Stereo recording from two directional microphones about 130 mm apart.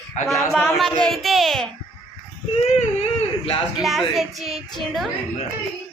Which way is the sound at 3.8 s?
Centre (ahead or behind).